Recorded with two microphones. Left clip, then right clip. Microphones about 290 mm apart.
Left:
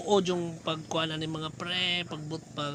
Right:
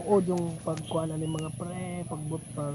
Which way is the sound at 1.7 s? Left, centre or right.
Centre.